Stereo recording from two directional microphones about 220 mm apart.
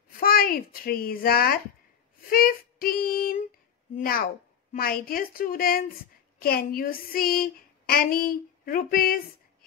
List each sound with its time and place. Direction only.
0.2 s a child's voice: 40° left (ahead or behind)
2.2 s child singing: 40° left (ahead or behind)
6.4 s a sound: 40° left (ahead or behind)